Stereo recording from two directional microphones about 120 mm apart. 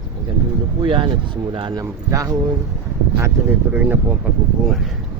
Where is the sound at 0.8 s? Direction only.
40° right (ahead or behind).